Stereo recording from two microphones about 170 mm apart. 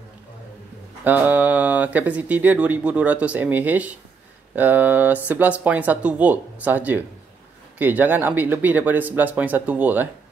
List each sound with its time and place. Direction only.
1.0 s speech: 10° right (ahead or behind)